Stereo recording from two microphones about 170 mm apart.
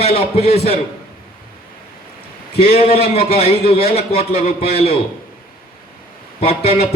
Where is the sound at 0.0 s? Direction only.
35° left (ahead or behind).